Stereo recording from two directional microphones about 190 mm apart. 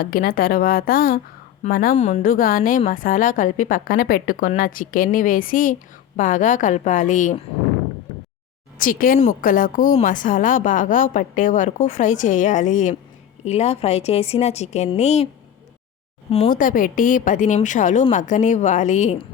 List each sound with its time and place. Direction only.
0.0 s a woman's voice: 50° left (ahead or behind)
8.8 s a woman's voice: 45° left (ahead or behind)
16.3 s a woman's voice: 40° left (ahead or behind)